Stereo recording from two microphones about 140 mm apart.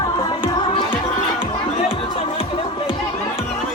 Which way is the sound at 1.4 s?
40° left (ahead or behind).